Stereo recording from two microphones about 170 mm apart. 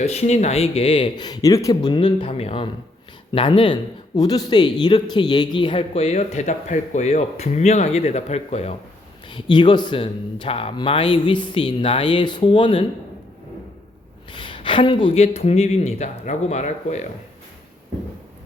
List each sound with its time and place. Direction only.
0.0 s speech: 40° left (ahead or behind)
9.2 s speech: 30° left (ahead or behind)
14.3 s speech: 30° left (ahead or behind)